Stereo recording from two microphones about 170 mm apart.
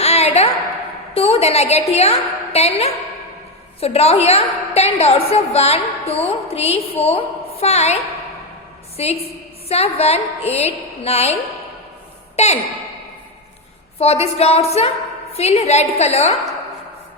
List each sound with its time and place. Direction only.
0.0 s a sound: 40° left (ahead or behind)
1.1 s a woman's voice: 35° left (ahead or behind)
9.0 s a woman's voice: 35° left (ahead or behind)
12.4 s a woman's voice: 40° left (ahead or behind)
14.0 s a woman's voice: 35° left (ahead or behind)